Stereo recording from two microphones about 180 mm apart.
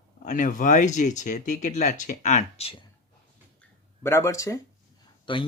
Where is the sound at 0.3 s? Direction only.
45° left (ahead or behind).